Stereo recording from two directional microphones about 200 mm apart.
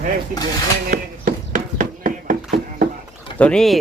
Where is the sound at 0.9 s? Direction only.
45° right (ahead or behind).